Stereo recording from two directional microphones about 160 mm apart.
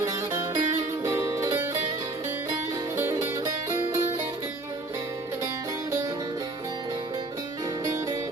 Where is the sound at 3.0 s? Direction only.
15° right (ahead or behind).